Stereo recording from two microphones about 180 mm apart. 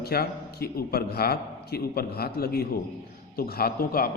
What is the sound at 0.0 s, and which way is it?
A man's voice, 60° left (ahead or behind).